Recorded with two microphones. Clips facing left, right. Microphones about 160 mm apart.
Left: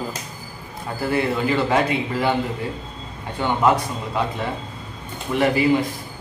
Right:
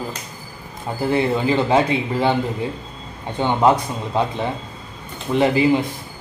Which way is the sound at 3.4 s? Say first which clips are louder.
Right 3 dB; 25° right (ahead or behind).